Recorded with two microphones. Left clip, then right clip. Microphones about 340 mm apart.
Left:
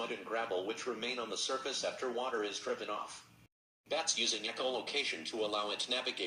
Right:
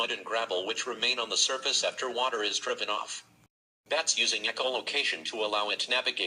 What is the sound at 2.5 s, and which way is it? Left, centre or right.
Speech, right.